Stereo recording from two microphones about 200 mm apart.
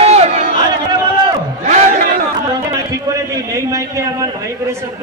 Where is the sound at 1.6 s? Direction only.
35° right (ahead or behind).